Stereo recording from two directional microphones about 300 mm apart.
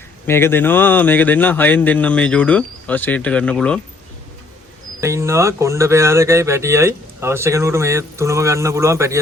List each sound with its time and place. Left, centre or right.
0.3 s speech: centre
4.9 s speech: centre